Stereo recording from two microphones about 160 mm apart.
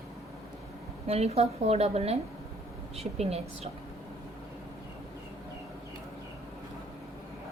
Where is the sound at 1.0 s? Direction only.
40° right (ahead or behind).